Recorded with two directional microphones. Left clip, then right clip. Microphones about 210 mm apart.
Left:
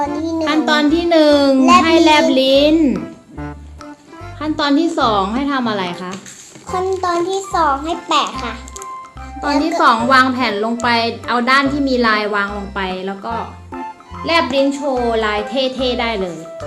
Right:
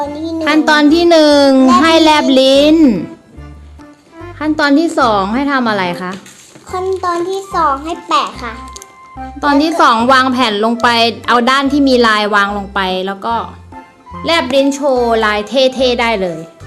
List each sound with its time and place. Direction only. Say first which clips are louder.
0.0 s music: even; centre (ahead or behind)
0.4 s a woman's voice: right 6 dB; 45° right (ahead or behind)
4.4 s a woman's voice: right 5 dB; 40° right (ahead or behind)
6.7 s a child's voice: right 2 dB; centre (ahead or behind)
9.4 s a woman's voice: right 4 dB; 50° right (ahead or behind)
14.5 s a woman's voice: right 5 dB; 55° right (ahead or behind)